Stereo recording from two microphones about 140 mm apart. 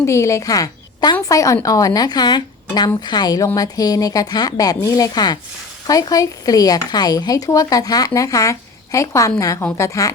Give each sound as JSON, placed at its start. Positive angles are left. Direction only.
{"t": 0.0, "sound": "a woman's voice", "side_deg": 20}